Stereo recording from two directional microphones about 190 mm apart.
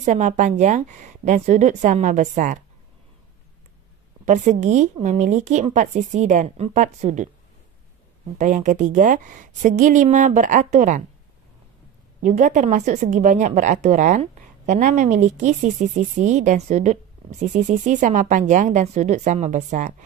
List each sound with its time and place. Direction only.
0.0 s a woman's voice: 40° right (ahead or behind)
4.3 s a woman's voice: 40° right (ahead or behind)
8.4 s a woman's voice: 40° right (ahead or behind)
12.2 s a woman's voice: 40° right (ahead or behind)